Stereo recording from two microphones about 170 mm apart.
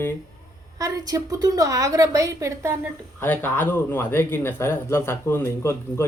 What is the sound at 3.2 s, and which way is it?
A man's voice, 10° left (ahead or behind).